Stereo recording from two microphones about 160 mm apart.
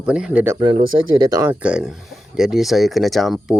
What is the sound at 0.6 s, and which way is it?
Speech, 30° right (ahead or behind).